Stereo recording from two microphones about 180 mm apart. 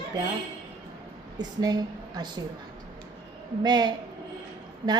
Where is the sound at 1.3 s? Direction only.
20° right (ahead or behind).